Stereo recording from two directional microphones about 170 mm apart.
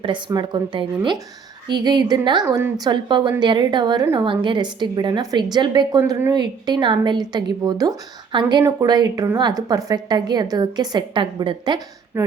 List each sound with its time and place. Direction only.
0.0 s a woman's voice: 25° right (ahead or behind)
6.0 s a woman's voice: 15° right (ahead or behind)
12.1 s speech: 15° right (ahead or behind)